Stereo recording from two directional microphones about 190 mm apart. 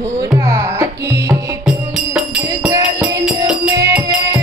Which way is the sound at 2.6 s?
15° right (ahead or behind).